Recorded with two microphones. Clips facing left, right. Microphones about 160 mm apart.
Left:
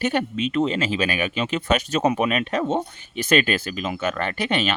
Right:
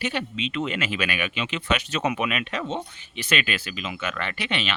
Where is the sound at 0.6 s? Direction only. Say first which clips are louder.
Left 5 dB; 30° left (ahead or behind).